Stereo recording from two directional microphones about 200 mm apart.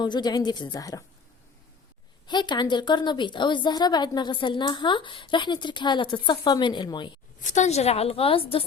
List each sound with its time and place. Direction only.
0.0 s a woman's voice: 20° left (ahead or behind)
2.2 s a woman's voice: 20° left (ahead or behind)
7.4 s a woman's voice: 35° left (ahead or behind)